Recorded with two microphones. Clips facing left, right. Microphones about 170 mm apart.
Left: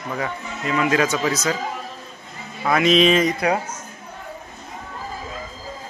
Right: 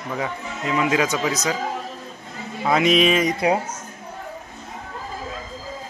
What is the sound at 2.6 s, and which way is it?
Speech, 15° right (ahead or behind).